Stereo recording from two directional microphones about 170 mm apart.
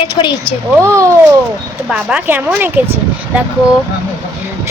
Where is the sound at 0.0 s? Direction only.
30° left (ahead or behind).